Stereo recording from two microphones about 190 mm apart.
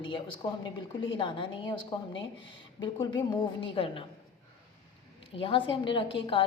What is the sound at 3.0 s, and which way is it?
A woman's voice, 25° left (ahead or behind).